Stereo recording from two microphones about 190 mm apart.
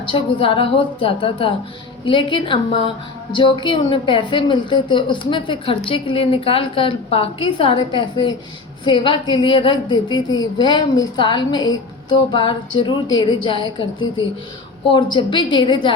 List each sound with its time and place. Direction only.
0.1 s a woman's voice: 25° left (ahead or behind)
14.8 s a woman's voice: 25° left (ahead or behind)